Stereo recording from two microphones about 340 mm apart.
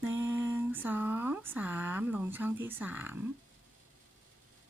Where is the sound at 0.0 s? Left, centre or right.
Centre.